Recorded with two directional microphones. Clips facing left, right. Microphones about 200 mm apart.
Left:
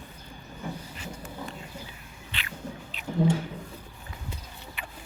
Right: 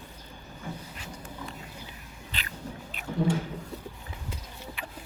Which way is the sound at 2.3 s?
40° right (ahead or behind).